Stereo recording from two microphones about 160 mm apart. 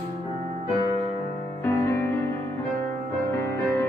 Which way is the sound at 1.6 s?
15° left (ahead or behind).